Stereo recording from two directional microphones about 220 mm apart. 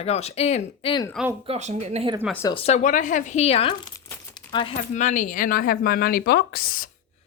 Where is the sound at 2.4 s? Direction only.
25° left (ahead or behind).